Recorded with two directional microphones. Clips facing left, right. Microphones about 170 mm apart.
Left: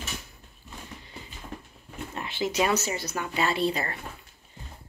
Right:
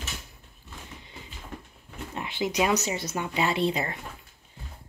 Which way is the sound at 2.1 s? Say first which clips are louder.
Even; 20° right (ahead or behind).